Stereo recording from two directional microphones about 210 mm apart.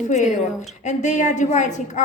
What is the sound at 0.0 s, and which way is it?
A woman's voice, 35° left (ahead or behind).